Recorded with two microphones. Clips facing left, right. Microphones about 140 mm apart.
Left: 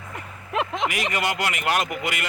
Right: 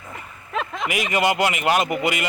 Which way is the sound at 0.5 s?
20° left (ahead or behind).